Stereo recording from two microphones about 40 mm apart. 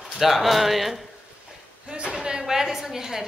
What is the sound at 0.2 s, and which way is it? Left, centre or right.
Speech, centre.